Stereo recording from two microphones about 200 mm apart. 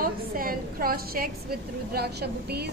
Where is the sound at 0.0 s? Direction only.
45° right (ahead or behind).